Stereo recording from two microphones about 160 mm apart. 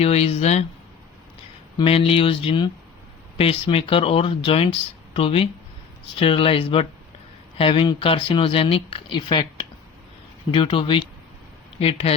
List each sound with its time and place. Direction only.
0.0 s speech: 40° left (ahead or behind)
1.8 s speech: 35° left (ahead or behind)
10.5 s speech: 35° left (ahead or behind)